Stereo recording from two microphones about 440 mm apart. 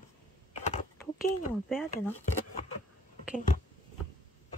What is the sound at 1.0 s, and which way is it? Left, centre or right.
Speech, centre.